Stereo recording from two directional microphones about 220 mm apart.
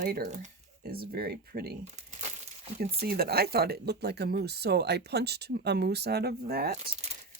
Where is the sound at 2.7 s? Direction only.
40° right (ahead or behind).